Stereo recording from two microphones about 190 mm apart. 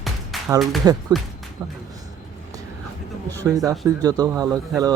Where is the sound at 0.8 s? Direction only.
20° right (ahead or behind).